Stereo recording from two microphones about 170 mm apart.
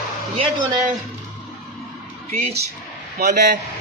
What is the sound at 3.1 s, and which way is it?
Speech, 65° right (ahead or behind).